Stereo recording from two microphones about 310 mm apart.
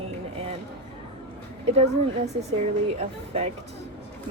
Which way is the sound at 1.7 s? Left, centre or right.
Right.